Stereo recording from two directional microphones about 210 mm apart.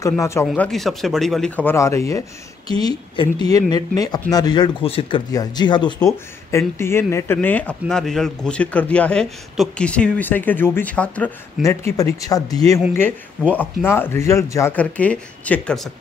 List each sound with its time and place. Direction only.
0.2 s speech: 15° left (ahead or behind)
0.5 s speech: centre (ahead or behind)